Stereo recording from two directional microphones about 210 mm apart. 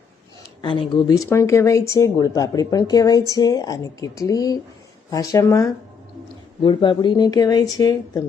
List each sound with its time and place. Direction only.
0.6 s speech: 20° left (ahead or behind)